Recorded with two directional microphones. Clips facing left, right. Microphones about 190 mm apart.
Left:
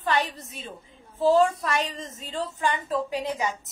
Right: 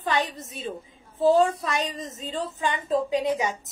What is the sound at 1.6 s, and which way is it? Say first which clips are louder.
A woman's voice: even; 20° right (ahead or behind).